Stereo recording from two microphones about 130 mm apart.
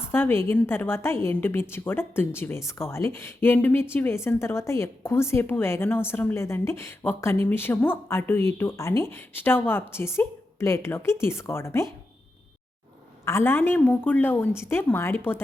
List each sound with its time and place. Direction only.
0.1 s a woman's voice: 15° left (ahead or behind)
13.2 s a woman's voice: 20° left (ahead or behind)